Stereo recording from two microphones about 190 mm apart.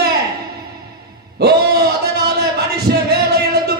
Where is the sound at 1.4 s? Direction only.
60° right (ahead or behind).